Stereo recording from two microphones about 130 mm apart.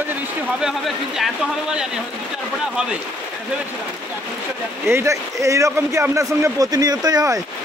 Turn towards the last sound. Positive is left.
turn(degrees=-30)  # may be behind; listen again after turning